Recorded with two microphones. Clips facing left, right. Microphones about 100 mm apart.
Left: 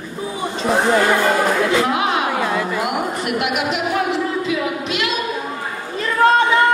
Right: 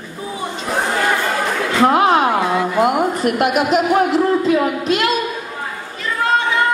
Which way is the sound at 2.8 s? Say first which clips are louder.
Right 5 dB; 40° right (ahead or behind).